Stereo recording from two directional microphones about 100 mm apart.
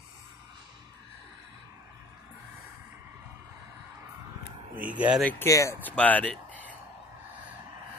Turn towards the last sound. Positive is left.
turn(degrees=15)  # may be behind; listen again after turning